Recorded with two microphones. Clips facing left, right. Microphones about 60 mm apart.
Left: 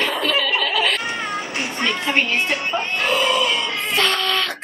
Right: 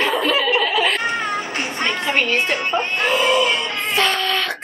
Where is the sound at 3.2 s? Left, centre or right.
Right.